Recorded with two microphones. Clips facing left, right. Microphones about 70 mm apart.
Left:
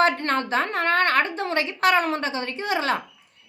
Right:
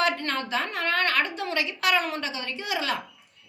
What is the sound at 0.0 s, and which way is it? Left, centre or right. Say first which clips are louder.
A woman's voice: left 5 dB; left.